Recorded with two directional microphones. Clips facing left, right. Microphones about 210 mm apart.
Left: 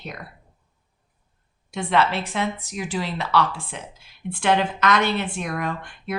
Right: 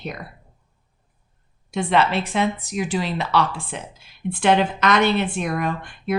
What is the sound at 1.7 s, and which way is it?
Speech, 20° right (ahead or behind).